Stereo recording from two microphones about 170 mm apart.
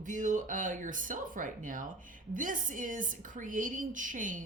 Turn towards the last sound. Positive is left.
turn(degrees=-50)  # may be behind; listen again after turning